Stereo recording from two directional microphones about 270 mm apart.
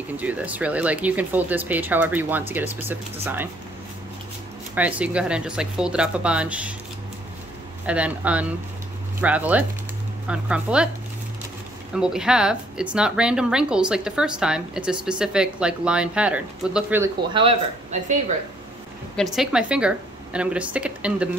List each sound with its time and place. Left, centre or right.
0.2 s speech: centre
4.7 s speech: centre
7.8 s speech: centre
11.9 s speech: centre
17.3 s a man's voice: centre
19.3 s speech: centre